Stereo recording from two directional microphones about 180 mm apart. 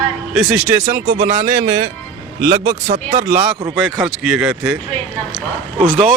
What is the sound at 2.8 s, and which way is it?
Speech, 35° right (ahead or behind).